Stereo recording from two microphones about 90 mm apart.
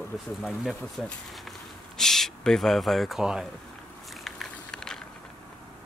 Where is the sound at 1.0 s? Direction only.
Centre (ahead or behind).